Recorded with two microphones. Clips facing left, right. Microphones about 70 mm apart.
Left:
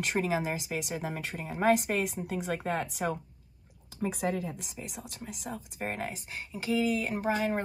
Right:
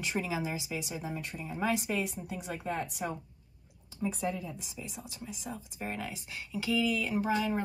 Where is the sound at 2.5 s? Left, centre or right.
Left.